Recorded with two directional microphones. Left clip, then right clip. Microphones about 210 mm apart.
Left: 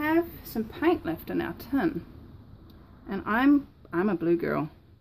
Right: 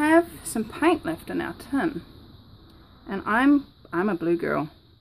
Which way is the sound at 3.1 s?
5° right (ahead or behind).